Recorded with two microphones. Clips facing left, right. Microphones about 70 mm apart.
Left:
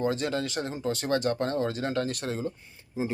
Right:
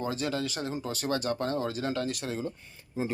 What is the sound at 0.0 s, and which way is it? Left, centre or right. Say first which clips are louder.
Speech: left 3 dB; left.